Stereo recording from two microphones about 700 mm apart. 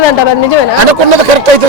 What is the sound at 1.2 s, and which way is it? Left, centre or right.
Speech, right.